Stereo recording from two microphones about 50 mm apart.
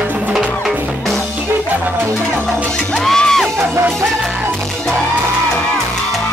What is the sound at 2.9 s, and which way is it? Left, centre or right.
Music, centre.